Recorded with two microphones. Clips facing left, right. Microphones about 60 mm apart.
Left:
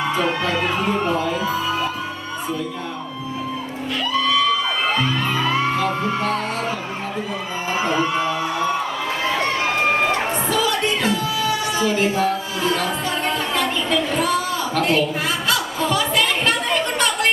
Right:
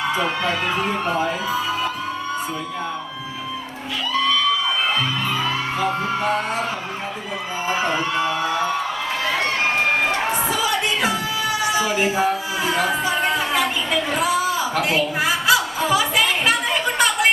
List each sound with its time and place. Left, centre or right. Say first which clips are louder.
1.0 s speech: left 1 dB; centre
8.1 s speech: even; centre
10.5 s music: left 1 dB; centre
11.8 s singing: left 2 dB; centre